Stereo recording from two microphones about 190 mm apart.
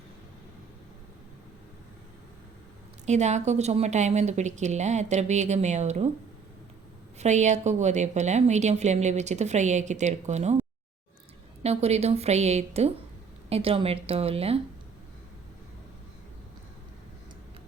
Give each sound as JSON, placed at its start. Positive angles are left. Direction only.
{"t": 3.1, "sound": "a woman's voice", "side_deg": -40}
{"t": 7.2, "sound": "a woman's voice", "side_deg": -40}
{"t": 11.6, "sound": "a woman's voice", "side_deg": -35}